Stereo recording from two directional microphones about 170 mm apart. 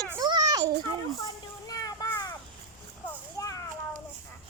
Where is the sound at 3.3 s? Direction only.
20° left (ahead or behind).